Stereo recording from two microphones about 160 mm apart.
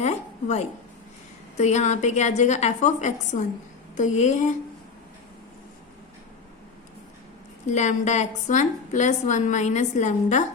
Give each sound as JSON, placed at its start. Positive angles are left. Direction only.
{"t": 0.0, "sound": "a woman's voice", "side_deg": 45}
{"t": 7.7, "sound": "a woman's voice", "side_deg": 50}